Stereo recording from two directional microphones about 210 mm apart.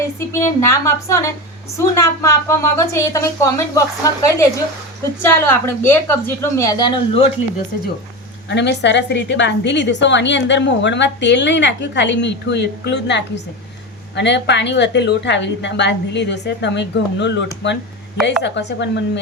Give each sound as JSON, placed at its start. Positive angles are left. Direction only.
{"t": 0.3, "sound": "a woman's voice", "side_deg": 15}
{"t": 8.4, "sound": "a woman's voice", "side_deg": 55}